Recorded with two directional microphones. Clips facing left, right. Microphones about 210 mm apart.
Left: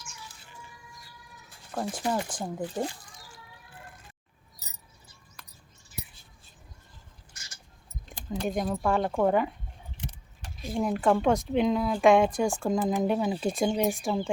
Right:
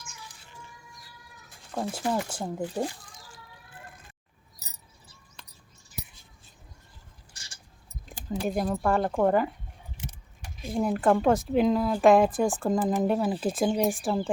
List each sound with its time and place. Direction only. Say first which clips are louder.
1.7 s speech: right 1 dB; 5° right (ahead or behind)
7.3 s vehicle: left 1 dB; 30° right (ahead or behind)
8.0 s speech: right 1 dB; 5° right (ahead or behind)
10.7 s speech: right 1 dB; centre (ahead or behind)